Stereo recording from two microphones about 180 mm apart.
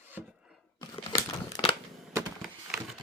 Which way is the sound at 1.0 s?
20° left (ahead or behind).